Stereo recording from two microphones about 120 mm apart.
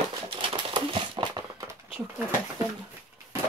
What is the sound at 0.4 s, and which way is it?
Crumpling, 45° right (ahead or behind).